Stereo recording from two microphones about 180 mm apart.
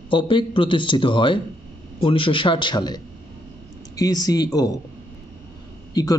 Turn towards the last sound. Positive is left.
turn(degrees=20)  # may be behind; listen again after turning